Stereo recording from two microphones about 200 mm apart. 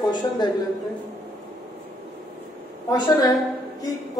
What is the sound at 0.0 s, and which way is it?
Speech, 20° left (ahead or behind).